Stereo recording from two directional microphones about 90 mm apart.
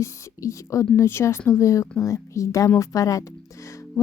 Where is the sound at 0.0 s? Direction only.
35° left (ahead or behind).